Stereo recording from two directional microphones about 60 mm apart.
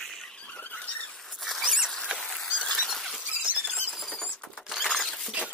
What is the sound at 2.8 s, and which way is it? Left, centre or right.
Rodents, centre.